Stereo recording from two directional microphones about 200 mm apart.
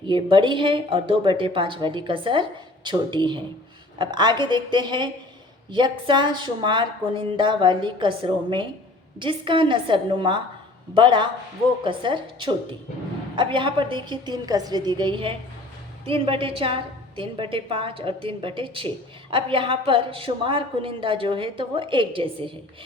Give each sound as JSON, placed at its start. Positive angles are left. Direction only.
{"t": 0.1, "sound": "a woman's voice", "side_deg": -25}